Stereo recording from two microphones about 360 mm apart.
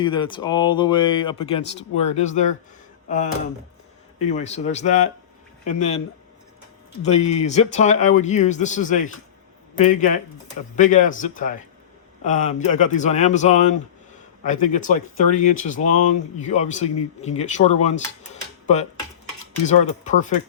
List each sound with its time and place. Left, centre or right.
0.0 s speech: centre
4.3 s speech: centre
7.0 s speech: centre
15.7 s speech: left
16.4 s speech: centre